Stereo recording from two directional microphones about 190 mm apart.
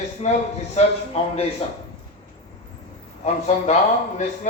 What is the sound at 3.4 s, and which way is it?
Speech, 35° left (ahead or behind).